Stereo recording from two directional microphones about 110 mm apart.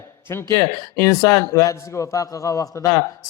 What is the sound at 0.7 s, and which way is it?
A man's voice, 35° left (ahead or behind).